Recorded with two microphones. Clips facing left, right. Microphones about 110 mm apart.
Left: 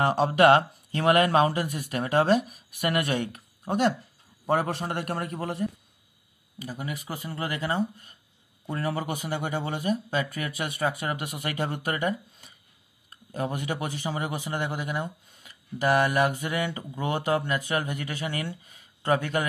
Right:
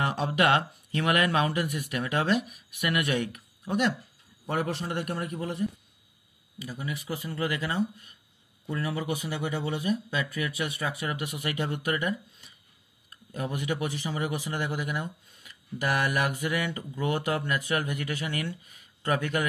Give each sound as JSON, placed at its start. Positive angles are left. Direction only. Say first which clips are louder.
{"t": 0.0, "sound": "a man's voice", "louder": "left 6 dB", "side_deg": 40}